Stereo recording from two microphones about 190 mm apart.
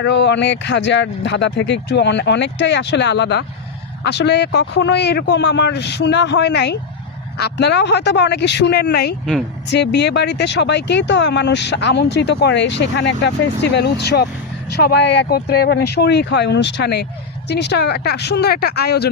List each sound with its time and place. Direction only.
0.0 s speech: 65° left (ahead or behind)